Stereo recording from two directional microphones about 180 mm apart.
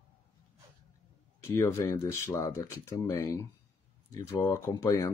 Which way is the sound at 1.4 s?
15° left (ahead or behind).